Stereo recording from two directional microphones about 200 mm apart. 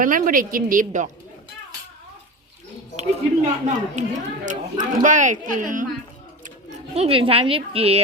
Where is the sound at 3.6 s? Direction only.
35° right (ahead or behind).